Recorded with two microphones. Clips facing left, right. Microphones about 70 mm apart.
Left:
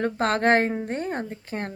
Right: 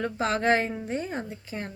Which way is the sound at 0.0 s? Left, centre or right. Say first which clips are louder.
Left 4 dB; left.